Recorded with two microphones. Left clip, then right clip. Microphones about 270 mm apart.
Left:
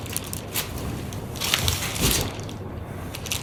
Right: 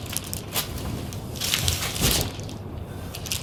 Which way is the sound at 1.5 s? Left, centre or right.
Centre.